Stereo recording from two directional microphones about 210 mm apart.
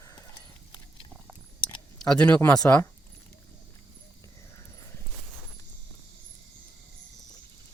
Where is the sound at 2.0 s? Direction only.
5° left (ahead or behind).